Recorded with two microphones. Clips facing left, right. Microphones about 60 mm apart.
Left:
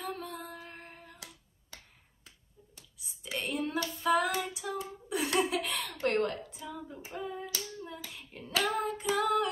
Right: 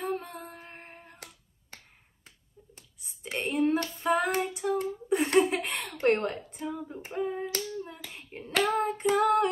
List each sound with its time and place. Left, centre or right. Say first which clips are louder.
0.0 s a sound: right 5 dB; right
4.0 s female singing: even; right
5.5 s a sound: right 2 dB; right
7.2 s hands: right 7 dB; right
8.1 s child singing: right 3 dB; right
9.1 s female singing: right 5 dB; right